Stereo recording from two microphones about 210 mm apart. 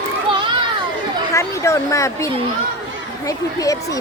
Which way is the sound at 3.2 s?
15° left (ahead or behind).